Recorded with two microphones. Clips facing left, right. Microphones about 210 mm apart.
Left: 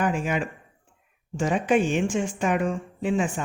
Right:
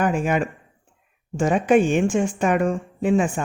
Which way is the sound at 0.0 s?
50° right (ahead or behind).